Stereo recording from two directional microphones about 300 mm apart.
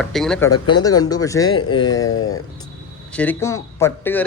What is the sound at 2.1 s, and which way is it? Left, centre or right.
Speech, left.